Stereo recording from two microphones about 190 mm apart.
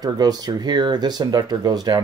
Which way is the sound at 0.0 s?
20° right (ahead or behind).